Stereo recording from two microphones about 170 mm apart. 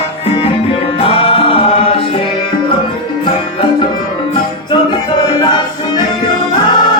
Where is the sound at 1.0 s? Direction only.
35° left (ahead or behind).